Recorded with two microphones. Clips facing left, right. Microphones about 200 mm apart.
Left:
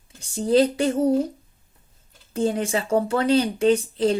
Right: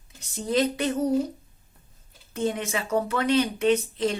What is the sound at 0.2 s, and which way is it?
Speech, 30° left (ahead or behind).